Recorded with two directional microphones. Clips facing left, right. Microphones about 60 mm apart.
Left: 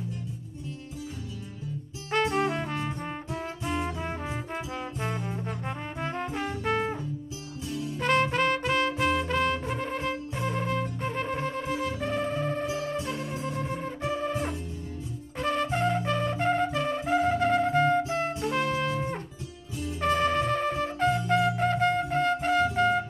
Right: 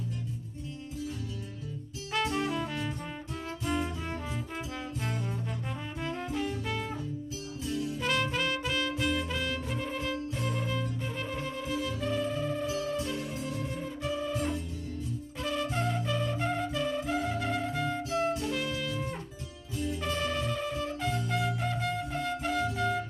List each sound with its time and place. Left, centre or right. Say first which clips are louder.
2.0 s music: left 5 dB; left
3.7 s brass instrument: left 2 dB; left
8.0 s music: left 8 dB; left
12.6 s music: left 2 dB; left